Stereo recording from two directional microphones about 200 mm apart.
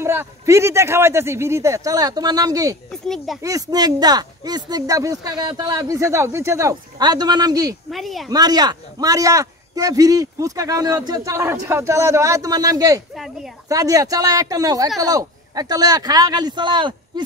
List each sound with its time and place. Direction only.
0.0 s a man's voice: 10° right (ahead or behind)
2.9 s a child's voice: centre (ahead or behind)
3.4 s speech: 20° right (ahead or behind)
7.9 s a child's voice: centre (ahead or behind)
8.3 s a man's voice: 20° right (ahead or behind)
13.1 s speech: centre (ahead or behind)
13.7 s a man's voice: 15° right (ahead or behind)